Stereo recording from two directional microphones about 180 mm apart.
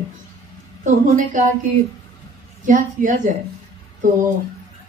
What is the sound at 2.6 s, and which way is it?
Speech, 45° right (ahead or behind).